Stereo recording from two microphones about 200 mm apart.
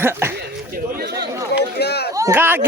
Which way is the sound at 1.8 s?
55° left (ahead or behind).